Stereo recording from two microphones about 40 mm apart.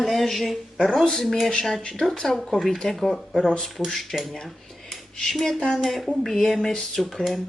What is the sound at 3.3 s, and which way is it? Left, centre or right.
Speech, left.